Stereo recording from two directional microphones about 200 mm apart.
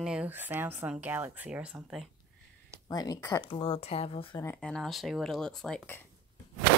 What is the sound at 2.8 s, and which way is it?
Speech, 20° left (ahead or behind).